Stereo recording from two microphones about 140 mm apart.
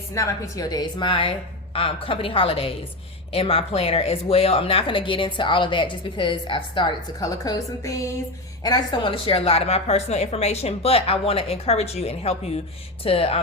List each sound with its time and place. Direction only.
0.1 s a woman's voice: 20° left (ahead or behind); by 13.4 s 45° left (ahead or behind)